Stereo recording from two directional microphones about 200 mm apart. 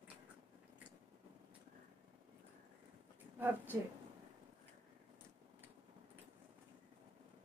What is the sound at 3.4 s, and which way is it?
Speech, 10° right (ahead or behind).